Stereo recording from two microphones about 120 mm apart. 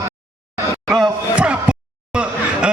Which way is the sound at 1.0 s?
10° right (ahead or behind).